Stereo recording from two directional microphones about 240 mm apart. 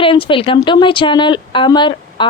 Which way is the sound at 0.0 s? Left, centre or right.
Left.